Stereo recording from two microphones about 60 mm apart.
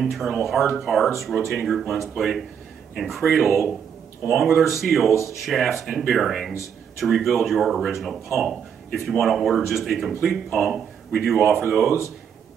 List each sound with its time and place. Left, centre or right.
0.0 s speech: centre
1.3 s speech: centre
1.7 s speech: centre
4.6 s speech: centre